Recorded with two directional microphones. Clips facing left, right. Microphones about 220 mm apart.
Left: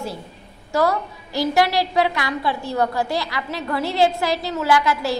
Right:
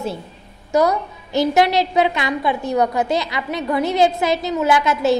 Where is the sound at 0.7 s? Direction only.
20° right (ahead or behind).